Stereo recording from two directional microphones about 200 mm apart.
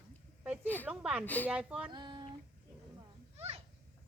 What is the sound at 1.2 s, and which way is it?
Speech, 10° left (ahead or behind).